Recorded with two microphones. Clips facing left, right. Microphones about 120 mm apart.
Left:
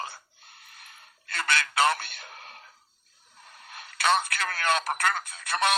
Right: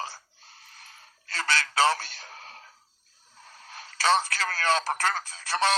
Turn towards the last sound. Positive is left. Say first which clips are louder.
# right 1 dB
turn(degrees=-30)  # may be behind; listen again after turning